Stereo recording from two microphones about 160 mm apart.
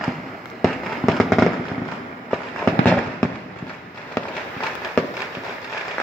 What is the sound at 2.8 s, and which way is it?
Fireworks, 5° left (ahead or behind).